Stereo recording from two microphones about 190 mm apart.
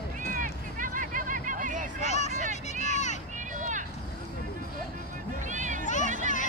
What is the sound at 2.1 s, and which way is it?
Vehicle, 35° left (ahead or behind).